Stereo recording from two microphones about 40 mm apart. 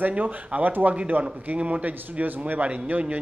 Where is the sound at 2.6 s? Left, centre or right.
Right.